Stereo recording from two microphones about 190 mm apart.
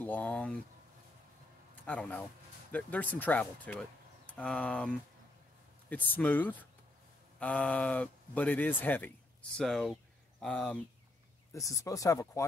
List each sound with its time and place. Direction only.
0.0 s speech: 10° left (ahead or behind)
1.9 s speech: 10° left (ahead or behind)
11.5 s speech: 15° left (ahead or behind)